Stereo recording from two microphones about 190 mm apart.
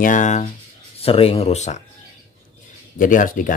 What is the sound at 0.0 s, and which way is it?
Speech, 40° left (ahead or behind).